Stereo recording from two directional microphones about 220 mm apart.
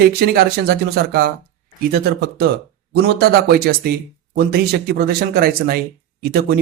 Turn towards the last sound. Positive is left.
turn(degrees=-45)  # may be behind; listen again after turning